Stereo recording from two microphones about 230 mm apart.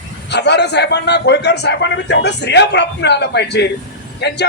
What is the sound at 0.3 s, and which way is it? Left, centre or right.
A man's voice, left.